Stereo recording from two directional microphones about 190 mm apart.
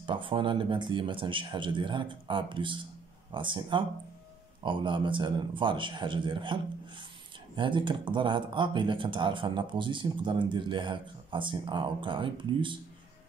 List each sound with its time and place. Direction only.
0.0 s speech: 25° right (ahead or behind)